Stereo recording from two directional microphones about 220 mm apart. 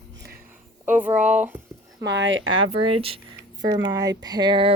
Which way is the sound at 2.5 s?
25° right (ahead or behind).